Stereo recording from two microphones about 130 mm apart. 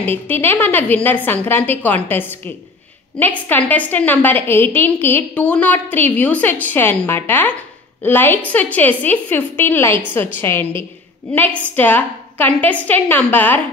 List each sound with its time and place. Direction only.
0.0 s a woman's voice: 15° left (ahead or behind)